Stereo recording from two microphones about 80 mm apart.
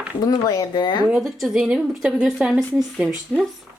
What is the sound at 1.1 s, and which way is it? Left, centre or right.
Speech, centre.